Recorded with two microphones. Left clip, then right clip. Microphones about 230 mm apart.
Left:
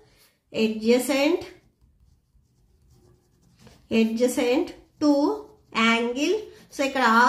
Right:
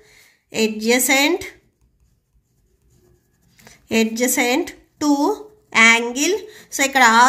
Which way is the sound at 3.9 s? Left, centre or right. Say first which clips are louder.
Right 4 dB; right.